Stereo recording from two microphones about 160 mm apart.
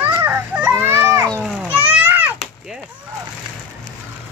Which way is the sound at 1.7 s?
10° right (ahead or behind).